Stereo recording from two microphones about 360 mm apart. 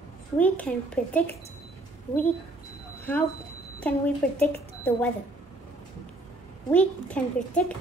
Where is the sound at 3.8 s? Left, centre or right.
Centre.